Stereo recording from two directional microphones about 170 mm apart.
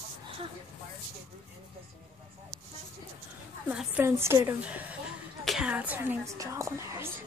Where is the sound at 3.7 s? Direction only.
10° right (ahead or behind).